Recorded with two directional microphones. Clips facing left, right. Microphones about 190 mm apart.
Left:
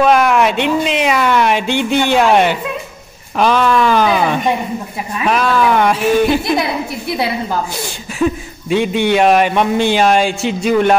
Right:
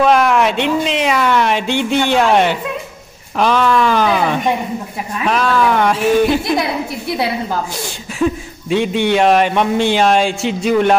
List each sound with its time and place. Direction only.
0.0 s speech: 5° left (ahead or behind)
8.2 s speech: 5° left (ahead or behind)